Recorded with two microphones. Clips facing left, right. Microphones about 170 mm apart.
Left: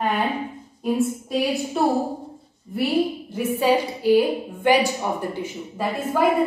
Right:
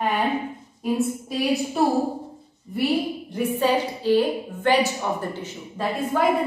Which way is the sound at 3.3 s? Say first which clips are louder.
Left 2 dB; 10° left (ahead or behind).